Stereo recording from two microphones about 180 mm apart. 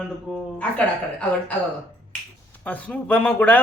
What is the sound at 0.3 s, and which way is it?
Speech, centre (ahead or behind).